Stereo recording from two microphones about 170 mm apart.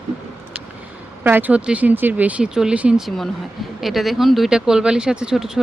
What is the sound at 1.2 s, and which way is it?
Speech, 10° right (ahead or behind).